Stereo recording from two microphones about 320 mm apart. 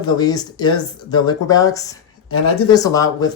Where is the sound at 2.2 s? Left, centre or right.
Left.